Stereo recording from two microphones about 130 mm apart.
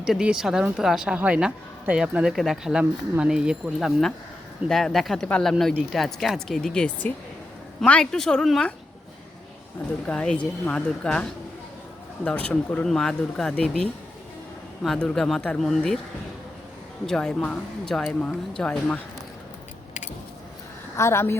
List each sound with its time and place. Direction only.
0.0 s speech: 5° right (ahead or behind)
10.1 s speech: 10° left (ahead or behind)
17.1 s speech: 5° left (ahead or behind)
20.9 s a woman's voice: 20° left (ahead or behind)